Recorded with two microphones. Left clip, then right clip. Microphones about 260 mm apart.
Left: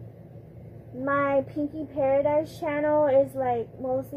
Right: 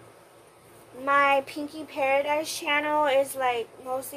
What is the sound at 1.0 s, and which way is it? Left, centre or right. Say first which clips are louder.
Speech: right 3 dB; centre.